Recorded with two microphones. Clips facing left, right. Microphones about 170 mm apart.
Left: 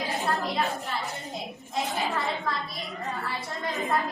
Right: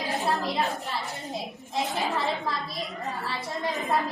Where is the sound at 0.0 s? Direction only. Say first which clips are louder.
Right 1 dB; centre (ahead or behind).